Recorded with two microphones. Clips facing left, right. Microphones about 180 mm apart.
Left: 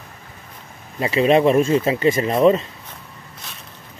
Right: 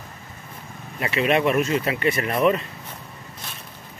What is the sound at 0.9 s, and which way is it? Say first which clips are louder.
Speech: left 6 dB; 30° left (ahead or behind).